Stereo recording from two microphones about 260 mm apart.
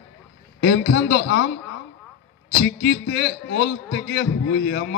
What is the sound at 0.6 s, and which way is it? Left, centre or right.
Speech, left.